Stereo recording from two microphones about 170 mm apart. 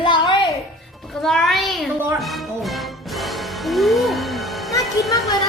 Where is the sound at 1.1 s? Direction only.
Centre (ahead or behind).